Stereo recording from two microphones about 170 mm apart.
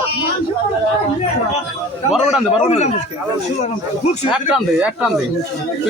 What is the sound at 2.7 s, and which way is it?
Speech, 40° left (ahead or behind).